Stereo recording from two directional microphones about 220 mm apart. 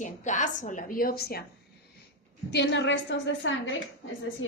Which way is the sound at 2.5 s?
50° left (ahead or behind).